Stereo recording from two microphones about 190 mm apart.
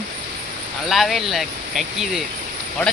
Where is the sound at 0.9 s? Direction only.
Centre (ahead or behind).